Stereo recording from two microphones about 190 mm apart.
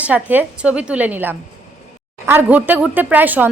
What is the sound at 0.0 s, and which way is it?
Speech, 10° right (ahead or behind).